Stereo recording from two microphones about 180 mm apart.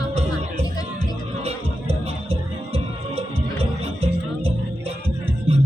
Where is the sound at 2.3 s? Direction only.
35° right (ahead or behind).